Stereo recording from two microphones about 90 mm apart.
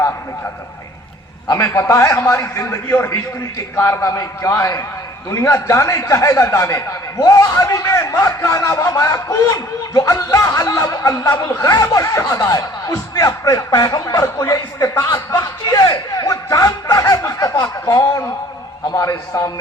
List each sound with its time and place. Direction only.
1.5 s speech: 35° left (ahead or behind)
14.5 s a sound: 40° left (ahead or behind)
17.6 s speech: 40° left (ahead or behind)